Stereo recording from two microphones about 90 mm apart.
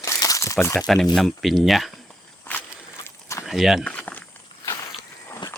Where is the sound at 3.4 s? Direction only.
Centre (ahead or behind).